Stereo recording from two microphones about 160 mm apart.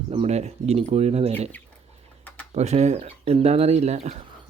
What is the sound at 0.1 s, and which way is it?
Speech, 40° right (ahead or behind).